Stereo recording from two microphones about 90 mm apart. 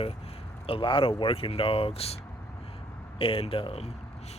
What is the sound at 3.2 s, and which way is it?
Speech, 90° left.